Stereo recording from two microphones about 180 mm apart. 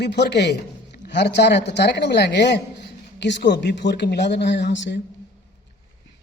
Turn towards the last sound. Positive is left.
turn(degrees=80)